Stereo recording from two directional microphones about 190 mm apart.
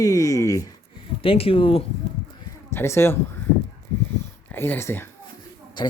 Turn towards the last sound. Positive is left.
turn(degrees=25)  # may be behind; listen again after turning